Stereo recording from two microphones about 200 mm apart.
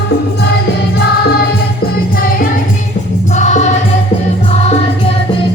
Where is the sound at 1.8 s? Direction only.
45° left (ahead or behind).